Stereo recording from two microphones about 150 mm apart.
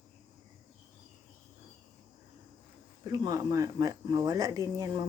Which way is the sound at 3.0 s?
25° right (ahead or behind).